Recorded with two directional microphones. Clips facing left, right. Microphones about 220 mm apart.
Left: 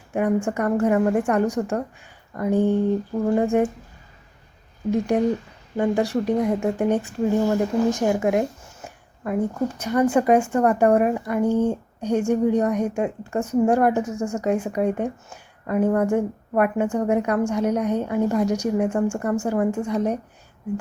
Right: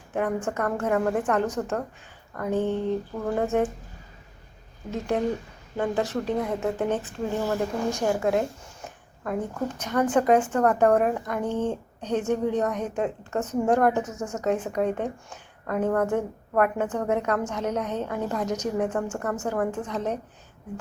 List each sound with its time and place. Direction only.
0.1 s speech: 10° left (ahead or behind)
4.9 s speech: 10° left (ahead or behind)